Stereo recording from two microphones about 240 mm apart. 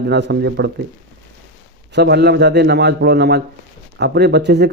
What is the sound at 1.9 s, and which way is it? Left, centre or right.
A man's voice, right.